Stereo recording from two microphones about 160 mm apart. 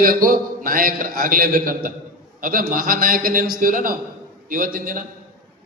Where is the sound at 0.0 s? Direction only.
60° right (ahead or behind).